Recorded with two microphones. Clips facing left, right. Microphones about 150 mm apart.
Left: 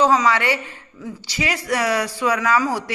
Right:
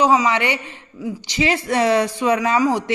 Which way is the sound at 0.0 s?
15° right (ahead or behind).